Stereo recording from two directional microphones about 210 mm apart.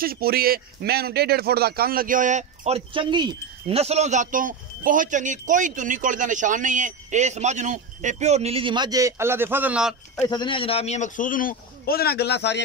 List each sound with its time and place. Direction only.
0.0 s speech: 45° right (ahead or behind); by 9.9 s 5° right (ahead or behind)
10.2 s a man's voice: 20° left (ahead or behind); by 12.6 s 55° left (ahead or behind)